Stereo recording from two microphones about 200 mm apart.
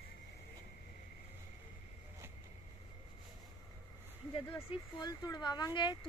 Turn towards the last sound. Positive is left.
turn(degrees=20)  # may be behind; listen again after turning